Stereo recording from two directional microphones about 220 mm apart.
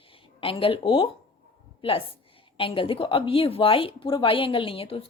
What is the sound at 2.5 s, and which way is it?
A woman's voice, 25° left (ahead or behind).